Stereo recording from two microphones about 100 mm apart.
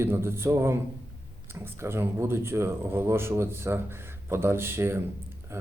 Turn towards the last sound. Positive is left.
turn(degrees=-25)  # may be behind; listen again after turning